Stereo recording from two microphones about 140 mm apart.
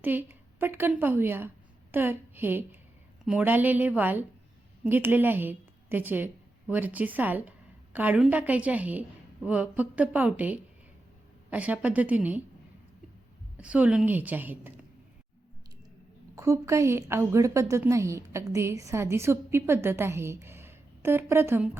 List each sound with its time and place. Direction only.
0.0 s a woman's voice: 15° right (ahead or behind)
13.6 s a woman's voice: 10° right (ahead or behind)
16.3 s a woman's voice: 20° right (ahead or behind)